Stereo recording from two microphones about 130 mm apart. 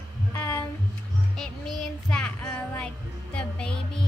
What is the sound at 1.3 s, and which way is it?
Child singing, 5° left (ahead or behind).